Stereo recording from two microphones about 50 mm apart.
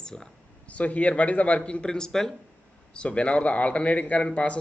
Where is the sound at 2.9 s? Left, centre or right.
Left.